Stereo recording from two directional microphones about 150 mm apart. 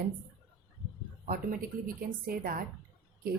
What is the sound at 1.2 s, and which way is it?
Speech, 70° right (ahead or behind).